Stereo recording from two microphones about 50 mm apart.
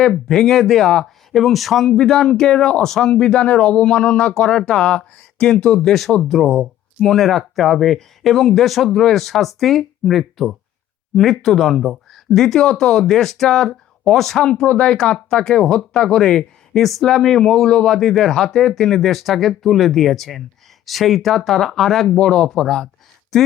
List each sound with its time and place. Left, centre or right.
0.0 s a man's voice: centre
5.9 s speech: centre
14.4 s a man's voice: left
14.9 s speech: centre